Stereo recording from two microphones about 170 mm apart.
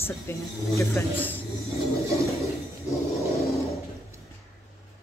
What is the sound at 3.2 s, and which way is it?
Vehicle, 20° left (ahead or behind).